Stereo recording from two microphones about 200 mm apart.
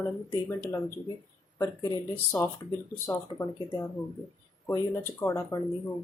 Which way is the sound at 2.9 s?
10° left (ahead or behind).